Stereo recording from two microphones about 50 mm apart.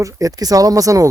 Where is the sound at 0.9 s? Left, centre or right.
Right.